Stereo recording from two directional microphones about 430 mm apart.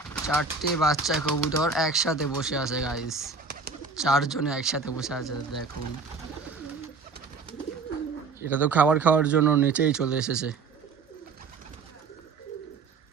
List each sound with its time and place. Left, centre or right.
0.3 s speech: centre
3.5 s bird: right
3.9 s speech: centre
8.4 s speech: centre